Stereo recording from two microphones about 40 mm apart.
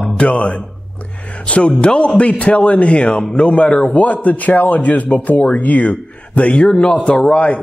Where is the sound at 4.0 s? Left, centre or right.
Left.